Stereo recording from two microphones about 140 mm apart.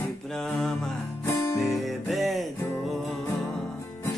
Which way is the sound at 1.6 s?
Centre (ahead or behind).